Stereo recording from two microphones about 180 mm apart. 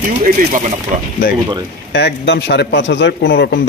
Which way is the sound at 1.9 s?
70° left (ahead or behind).